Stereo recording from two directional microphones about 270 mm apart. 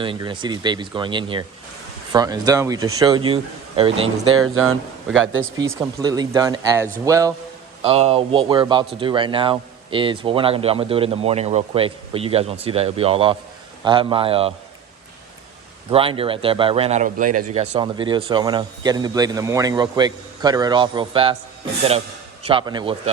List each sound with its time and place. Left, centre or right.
0.0 s speech: centre
4.4 s speech: right
5.5 s speech: centre
15.9 s speech: right
22.4 s speech: centre